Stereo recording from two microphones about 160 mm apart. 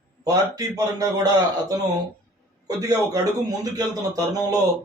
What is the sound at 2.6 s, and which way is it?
A man's voice, 20° right (ahead or behind).